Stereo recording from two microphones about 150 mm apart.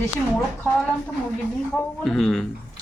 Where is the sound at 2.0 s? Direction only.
Centre (ahead or behind).